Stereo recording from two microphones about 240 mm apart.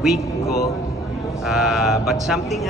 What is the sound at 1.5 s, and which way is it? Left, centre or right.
Speech, centre.